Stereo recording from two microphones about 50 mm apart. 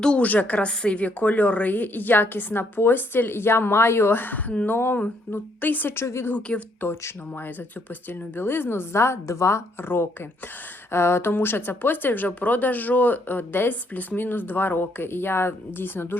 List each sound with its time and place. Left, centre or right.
0.2 s a woman's voice: left
6.0 s a woman's voice: left
6.5 s a woman's voice: left
8.4 s a woman's voice: left
10.9 s speech: left